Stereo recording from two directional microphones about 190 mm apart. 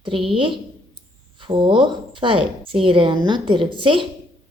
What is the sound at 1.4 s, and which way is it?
A woman's voice, 25° right (ahead or behind).